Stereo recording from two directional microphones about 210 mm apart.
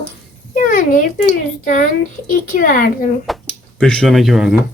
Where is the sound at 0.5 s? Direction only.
40° left (ahead or behind).